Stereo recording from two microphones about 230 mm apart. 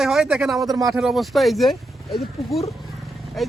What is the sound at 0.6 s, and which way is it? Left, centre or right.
Speech, centre.